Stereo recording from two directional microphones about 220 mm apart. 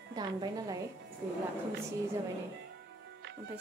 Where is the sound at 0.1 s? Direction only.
20° right (ahead or behind).